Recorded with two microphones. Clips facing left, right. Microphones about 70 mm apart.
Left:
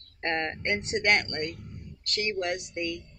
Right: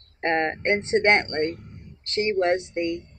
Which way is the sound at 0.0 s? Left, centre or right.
Right.